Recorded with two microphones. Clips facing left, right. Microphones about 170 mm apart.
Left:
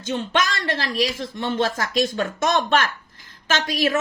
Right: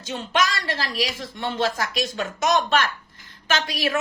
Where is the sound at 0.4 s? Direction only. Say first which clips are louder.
Left 1 dB; 50° left (ahead or behind).